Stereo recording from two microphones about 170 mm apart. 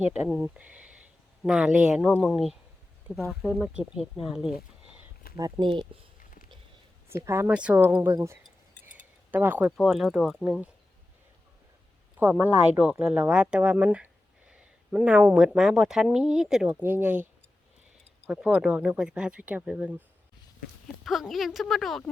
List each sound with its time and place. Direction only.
0.1 s speech: 10° right (ahead or behind)
5.4 s speech: 25° right (ahead or behind)
6.1 s a sound: 55° left (ahead or behind)
7.1 s speech: 15° right (ahead or behind)
12.2 s speech: 10° right (ahead or behind)
18.3 s speech: 5° right (ahead or behind)
21.0 s speech: centre (ahead or behind)